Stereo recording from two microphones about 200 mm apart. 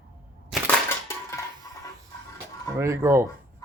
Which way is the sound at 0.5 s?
Centre (ahead or behind).